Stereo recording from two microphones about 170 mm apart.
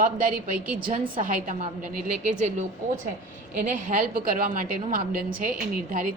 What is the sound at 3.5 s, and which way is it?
A woman's voice, 50° right (ahead or behind).